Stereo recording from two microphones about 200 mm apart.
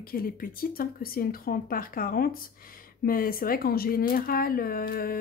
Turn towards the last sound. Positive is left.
turn(degrees=45)  # may be behind; listen again after turning